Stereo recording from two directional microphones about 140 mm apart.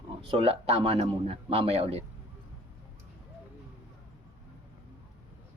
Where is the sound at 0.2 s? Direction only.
45° right (ahead or behind).